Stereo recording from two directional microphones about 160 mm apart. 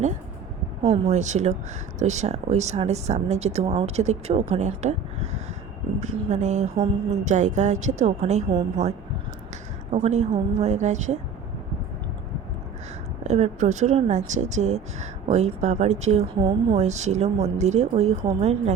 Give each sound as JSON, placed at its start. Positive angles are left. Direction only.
{"t": 1.0, "sound": "a woman's voice", "side_deg": -45}
{"t": 13.2, "sound": "a woman's voice", "side_deg": -45}
{"t": 16.4, "sound": "a woman's voice", "side_deg": -25}
{"t": 16.7, "sound": "a woman's voice", "side_deg": -45}